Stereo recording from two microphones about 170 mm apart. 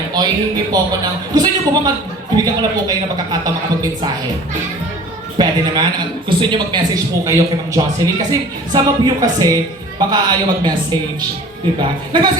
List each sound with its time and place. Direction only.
0.1 s a man's voice: 25° right (ahead or behind)
5.4 s a man's voice: 25° right (ahead or behind)
11.8 s a man's voice: 25° right (ahead or behind)